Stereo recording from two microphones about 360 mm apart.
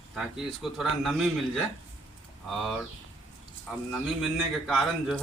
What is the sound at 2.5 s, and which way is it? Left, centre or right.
Speech, centre.